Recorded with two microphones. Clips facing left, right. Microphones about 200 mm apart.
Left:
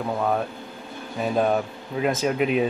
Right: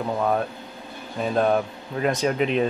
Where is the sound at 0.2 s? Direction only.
Centre (ahead or behind).